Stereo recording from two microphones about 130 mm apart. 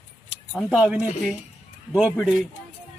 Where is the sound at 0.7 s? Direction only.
10° right (ahead or behind).